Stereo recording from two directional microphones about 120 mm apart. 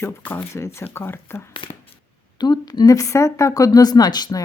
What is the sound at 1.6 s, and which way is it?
Speech, 50° left (ahead or behind).